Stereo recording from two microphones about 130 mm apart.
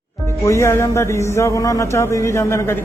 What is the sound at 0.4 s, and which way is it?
A man's voice, 25° left (ahead or behind).